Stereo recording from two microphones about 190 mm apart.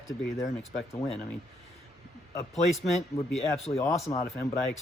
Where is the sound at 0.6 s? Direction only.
Centre (ahead or behind).